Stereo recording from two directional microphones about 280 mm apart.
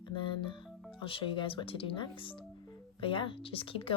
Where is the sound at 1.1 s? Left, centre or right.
Centre.